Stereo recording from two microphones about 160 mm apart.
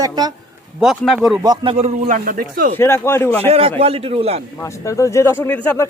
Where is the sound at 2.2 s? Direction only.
60° right (ahead or behind).